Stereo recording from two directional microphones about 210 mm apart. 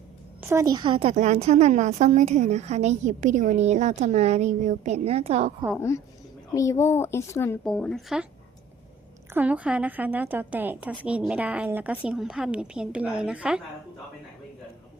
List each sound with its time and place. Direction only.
0.4 s a woman's voice: 15° right (ahead or behind); by 5.5 s 30° right (ahead or behind)
6.5 s speech: 15° left (ahead or behind); by 8.3 s centre (ahead or behind)
9.3 s a woman's voice: 5° right (ahead or behind)